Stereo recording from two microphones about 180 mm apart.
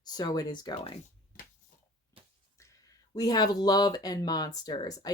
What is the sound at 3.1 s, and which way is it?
Speech, 20° left (ahead or behind).